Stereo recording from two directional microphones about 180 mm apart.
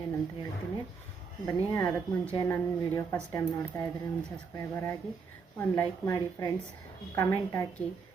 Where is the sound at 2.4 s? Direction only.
15° left (ahead or behind).